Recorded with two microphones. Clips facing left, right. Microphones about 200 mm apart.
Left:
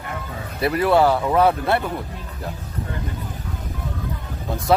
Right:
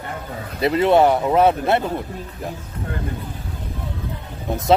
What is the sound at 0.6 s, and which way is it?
Speech, 25° right (ahead or behind).